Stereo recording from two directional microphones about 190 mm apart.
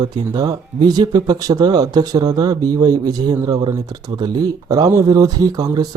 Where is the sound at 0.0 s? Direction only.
20° right (ahead or behind).